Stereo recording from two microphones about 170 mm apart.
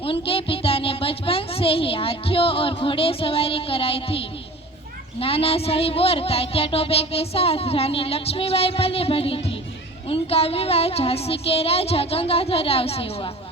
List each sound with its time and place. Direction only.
0.0 s speech: 30° left (ahead or behind)